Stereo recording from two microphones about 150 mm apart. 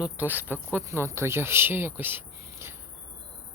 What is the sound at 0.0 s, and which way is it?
Speech, 10° right (ahead or behind).